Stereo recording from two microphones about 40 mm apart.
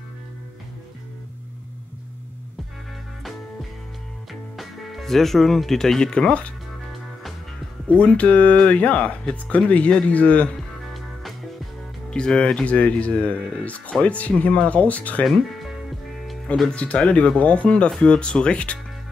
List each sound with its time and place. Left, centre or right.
4.3 s music: centre
5.9 s speech: centre
7.9 s speech: left
10.9 s music: centre
12.1 s speech: left
15.2 s speech: centre
15.9 s music: centre
16.7 s speech: left